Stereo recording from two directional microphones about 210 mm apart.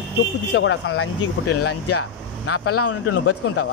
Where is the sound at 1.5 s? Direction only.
90° left.